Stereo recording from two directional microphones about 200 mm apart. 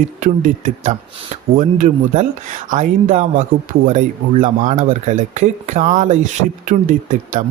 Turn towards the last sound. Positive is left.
turn(degrees=-40)  # may be behind; listen again after turning